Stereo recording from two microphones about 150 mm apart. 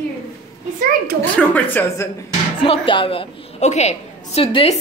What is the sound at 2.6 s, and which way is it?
A woman's voice, 35° left (ahead or behind).